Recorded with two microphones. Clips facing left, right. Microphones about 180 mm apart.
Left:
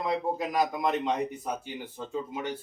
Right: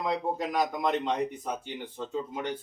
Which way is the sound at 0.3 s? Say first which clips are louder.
Left 1 dB; 5° left (ahead or behind).